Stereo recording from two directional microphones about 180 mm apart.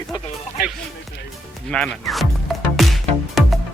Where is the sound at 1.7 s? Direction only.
5° left (ahead or behind).